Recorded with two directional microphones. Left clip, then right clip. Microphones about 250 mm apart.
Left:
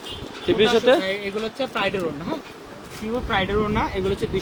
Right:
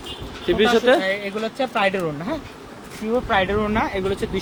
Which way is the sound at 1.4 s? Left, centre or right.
Right.